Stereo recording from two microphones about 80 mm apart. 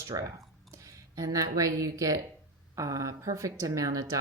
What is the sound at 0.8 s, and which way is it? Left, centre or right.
Speech, right.